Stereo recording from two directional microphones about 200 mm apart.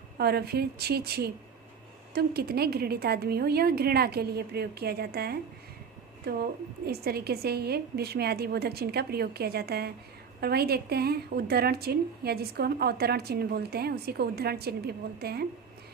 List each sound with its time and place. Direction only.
0.2 s a woman's voice: 50° right (ahead or behind)
6.8 s a woman's voice: 50° right (ahead or behind)